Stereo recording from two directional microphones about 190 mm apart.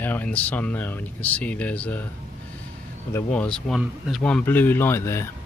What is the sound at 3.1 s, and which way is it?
Speech, 5° left (ahead or behind).